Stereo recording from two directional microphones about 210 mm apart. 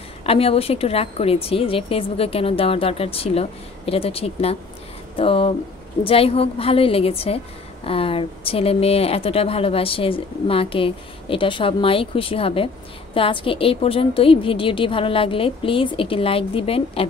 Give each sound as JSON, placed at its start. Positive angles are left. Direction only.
{"t": 0.2, "sound": "a woman's voice", "side_deg": 30}